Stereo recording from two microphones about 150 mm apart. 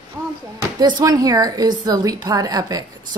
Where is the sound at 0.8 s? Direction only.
25° right (ahead or behind).